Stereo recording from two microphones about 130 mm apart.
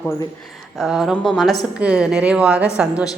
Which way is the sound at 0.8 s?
5° right (ahead or behind).